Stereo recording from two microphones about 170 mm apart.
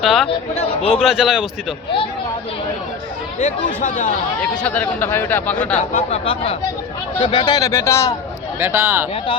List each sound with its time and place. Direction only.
0.0 s speech: centre (ahead or behind)
0.3 s speech: 35° left (ahead or behind)
0.9 s speech: centre (ahead or behind)
3.4 s speech: 50° left (ahead or behind)
4.6 s speech: 10° left (ahead or behind)
5.9 s speech: 35° left (ahead or behind); by 8.1 s 15° left (ahead or behind)
8.5 s speech: 15° right (ahead or behind)